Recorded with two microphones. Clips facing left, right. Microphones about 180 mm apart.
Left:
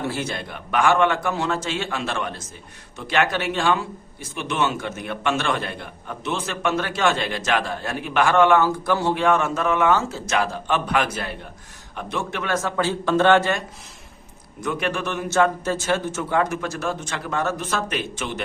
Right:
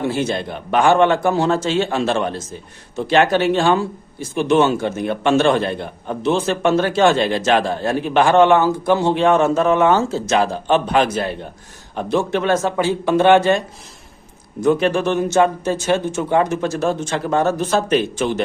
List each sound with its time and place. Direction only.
0.0 s a man's voice: 20° right (ahead or behind)
14.6 s a man's voice: 30° right (ahead or behind)